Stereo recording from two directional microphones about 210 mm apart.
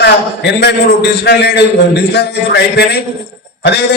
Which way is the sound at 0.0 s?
55° left (ahead or behind).